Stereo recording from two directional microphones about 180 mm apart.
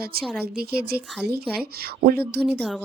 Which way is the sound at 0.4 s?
60° right (ahead or behind).